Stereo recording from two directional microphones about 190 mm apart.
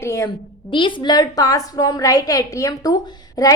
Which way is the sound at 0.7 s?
25° left (ahead or behind).